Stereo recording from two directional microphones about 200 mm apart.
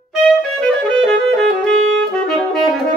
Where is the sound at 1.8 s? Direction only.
70° right (ahead or behind).